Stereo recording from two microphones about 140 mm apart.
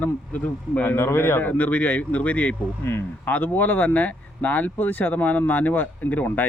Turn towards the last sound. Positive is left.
turn(degrees=10)  # may be behind; listen again after turning